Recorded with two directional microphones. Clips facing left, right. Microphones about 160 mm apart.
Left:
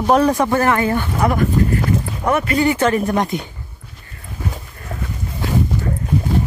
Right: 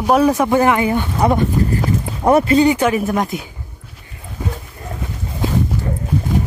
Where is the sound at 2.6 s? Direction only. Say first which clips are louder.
Right 1 dB; 15° right (ahead or behind).